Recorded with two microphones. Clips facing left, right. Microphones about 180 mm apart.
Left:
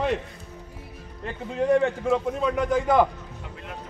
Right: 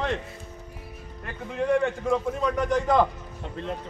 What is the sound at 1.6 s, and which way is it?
Speech, 20° left (ahead or behind).